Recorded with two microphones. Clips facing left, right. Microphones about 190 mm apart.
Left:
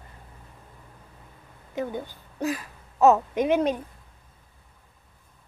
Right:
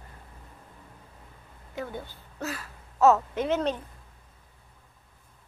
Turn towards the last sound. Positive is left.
turn(degrees=15)  # may be behind; listen again after turning